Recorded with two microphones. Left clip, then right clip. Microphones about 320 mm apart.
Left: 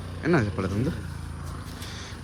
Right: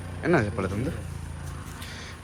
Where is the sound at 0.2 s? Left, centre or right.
Centre.